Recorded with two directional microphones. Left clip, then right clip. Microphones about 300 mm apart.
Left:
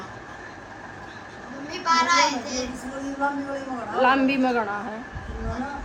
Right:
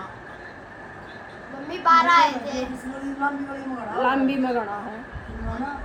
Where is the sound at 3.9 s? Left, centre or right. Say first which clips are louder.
Left 2 dB; centre.